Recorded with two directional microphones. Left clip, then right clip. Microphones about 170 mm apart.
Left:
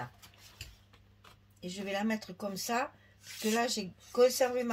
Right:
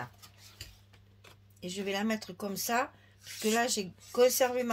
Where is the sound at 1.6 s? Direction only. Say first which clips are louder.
Right 2 dB; 50° right (ahead or behind).